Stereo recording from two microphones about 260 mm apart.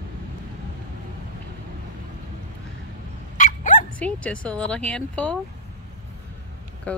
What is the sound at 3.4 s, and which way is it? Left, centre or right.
Dog, left.